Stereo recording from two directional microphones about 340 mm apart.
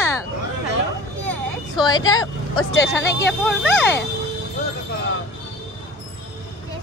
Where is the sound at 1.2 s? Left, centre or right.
Centre.